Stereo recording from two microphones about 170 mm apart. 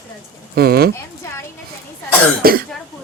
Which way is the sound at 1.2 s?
15° left (ahead or behind).